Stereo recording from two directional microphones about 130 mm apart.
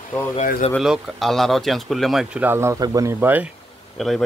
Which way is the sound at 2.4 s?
20° right (ahead or behind).